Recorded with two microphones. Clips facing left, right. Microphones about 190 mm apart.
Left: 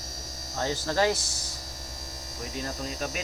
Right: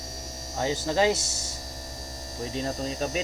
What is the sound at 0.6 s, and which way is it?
Speech, 20° right (ahead or behind).